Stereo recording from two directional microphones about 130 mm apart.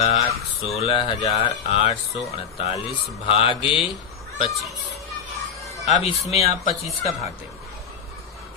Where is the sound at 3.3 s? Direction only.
45° left (ahead or behind).